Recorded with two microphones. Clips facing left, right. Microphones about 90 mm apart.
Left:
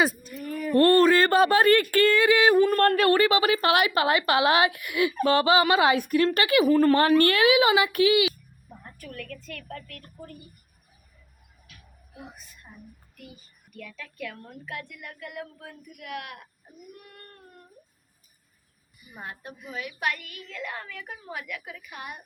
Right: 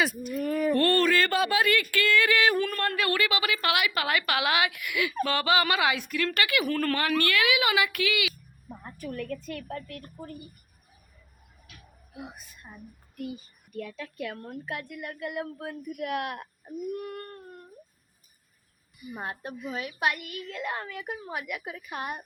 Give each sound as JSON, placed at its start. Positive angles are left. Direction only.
{"t": 0.0, "sound": "speech", "side_deg": 35}
{"t": 0.3, "sound": "a sound", "side_deg": -50}
{"t": 0.8, "sound": "speech", "side_deg": 35}
{"t": 2.2, "sound": "singing", "side_deg": 25}
{"t": 2.7, "sound": "speech", "side_deg": 45}
{"t": 8.8, "sound": "a woman's voice", "side_deg": -20}
{"t": 13.7, "sound": "a woman's voice", "side_deg": -30}
{"t": 19.1, "sound": "a woman's voice", "side_deg": -25}
{"t": 20.1, "sound": "a woman's voice", "side_deg": -20}
{"t": 21.6, "sound": "a woman's voice", "side_deg": -30}